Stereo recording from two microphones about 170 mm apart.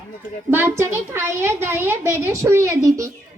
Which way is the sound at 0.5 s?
15° right (ahead or behind).